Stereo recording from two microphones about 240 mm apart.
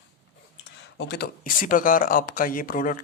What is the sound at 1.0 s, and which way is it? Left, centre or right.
Speech, left.